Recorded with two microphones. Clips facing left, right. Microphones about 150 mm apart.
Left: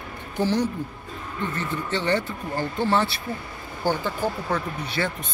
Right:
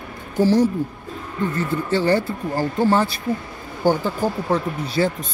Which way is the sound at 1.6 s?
40° right (ahead or behind).